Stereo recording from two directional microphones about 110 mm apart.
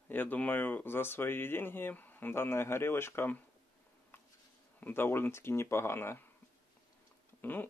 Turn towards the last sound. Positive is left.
turn(degrees=15)  # may be behind; listen again after turning